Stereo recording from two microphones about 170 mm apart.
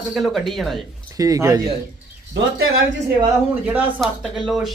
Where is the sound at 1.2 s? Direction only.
20° right (ahead or behind).